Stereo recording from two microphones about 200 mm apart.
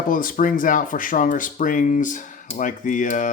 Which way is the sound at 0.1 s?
45° left (ahead or behind).